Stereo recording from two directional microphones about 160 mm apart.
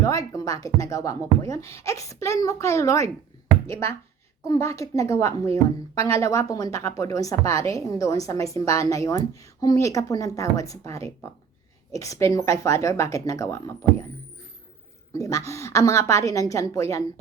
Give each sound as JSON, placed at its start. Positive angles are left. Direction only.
{"t": 0.0, "sound": "a woman's voice", "side_deg": 20}
{"t": 15.2, "sound": "a woman's voice", "side_deg": 20}